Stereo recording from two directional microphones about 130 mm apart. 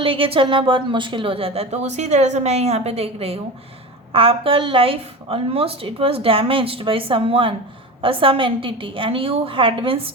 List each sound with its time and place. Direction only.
0.0 s a woman's voice: 45° right (ahead or behind)